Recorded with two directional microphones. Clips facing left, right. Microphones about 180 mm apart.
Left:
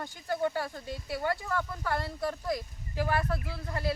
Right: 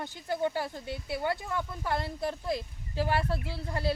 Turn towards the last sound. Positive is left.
turn(degrees=-30)  # may be behind; listen again after turning